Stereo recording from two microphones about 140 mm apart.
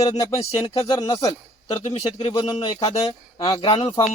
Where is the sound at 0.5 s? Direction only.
40° left (ahead or behind).